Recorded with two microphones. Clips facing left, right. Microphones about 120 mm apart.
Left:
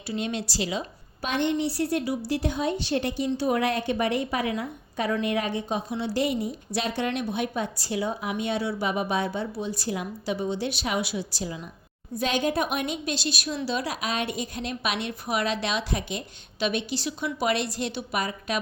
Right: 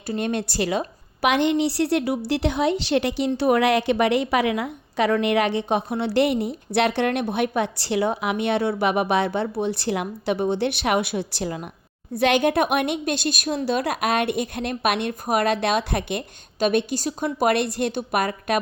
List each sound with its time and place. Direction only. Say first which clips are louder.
0.1 s a woman's voice: right 5 dB; 55° right (ahead or behind)
12.1 s a woman's voice: right 6 dB; 70° right (ahead or behind)